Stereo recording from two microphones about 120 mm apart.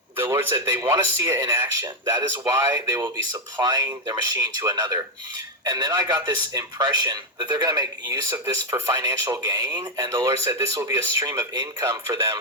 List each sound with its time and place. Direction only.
0.2 s a man's voice: 20° right (ahead or behind)